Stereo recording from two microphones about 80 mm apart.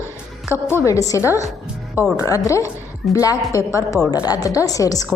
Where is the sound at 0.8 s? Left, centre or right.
Left.